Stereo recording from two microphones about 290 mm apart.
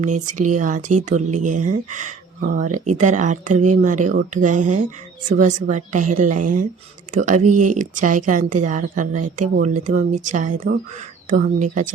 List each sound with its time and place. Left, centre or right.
0.0 s speech: right